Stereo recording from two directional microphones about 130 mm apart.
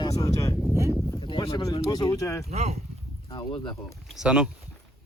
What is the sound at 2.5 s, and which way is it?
Speech, 55° right (ahead or behind).